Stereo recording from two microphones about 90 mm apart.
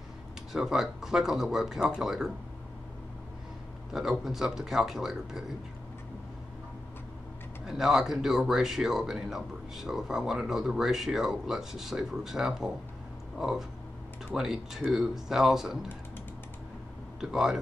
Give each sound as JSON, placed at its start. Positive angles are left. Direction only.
{"t": 0.5, "sound": "speech", "side_deg": -5}
{"t": 3.9, "sound": "speech", "side_deg": -5}
{"t": 7.6, "sound": "speech", "side_deg": -5}
{"t": 17.2, "sound": "speech", "side_deg": -5}